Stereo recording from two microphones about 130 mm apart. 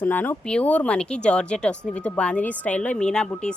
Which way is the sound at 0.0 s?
15° left (ahead or behind).